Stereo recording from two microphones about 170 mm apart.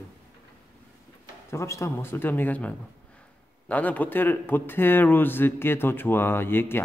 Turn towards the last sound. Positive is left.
turn(degrees=15)  # may be behind; listen again after turning